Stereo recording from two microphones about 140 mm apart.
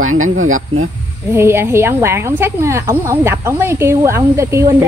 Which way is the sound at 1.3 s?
20° right (ahead or behind).